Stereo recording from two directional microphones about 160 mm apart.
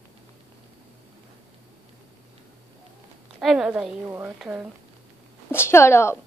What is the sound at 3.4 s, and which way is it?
A woman's voice, 5° right (ahead or behind).